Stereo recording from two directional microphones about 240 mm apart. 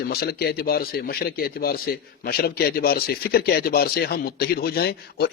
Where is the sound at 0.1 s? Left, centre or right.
Left.